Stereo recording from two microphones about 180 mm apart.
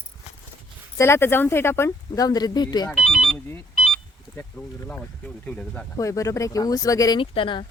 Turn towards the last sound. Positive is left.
turn(degrees=30)  # may be behind; listen again after turning